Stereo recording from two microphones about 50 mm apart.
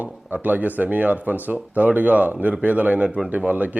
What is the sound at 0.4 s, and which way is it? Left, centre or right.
Speech, right.